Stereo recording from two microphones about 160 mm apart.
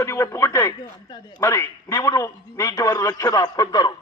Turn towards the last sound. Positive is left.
turn(degrees=25)  # may be behind; listen again after turning